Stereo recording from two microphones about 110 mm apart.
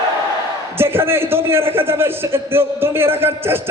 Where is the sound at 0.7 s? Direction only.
20° right (ahead or behind).